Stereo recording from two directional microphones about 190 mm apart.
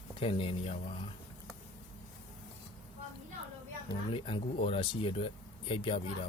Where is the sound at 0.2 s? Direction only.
30° left (ahead or behind).